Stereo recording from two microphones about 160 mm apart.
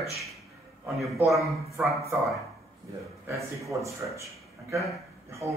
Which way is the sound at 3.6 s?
20° right (ahead or behind).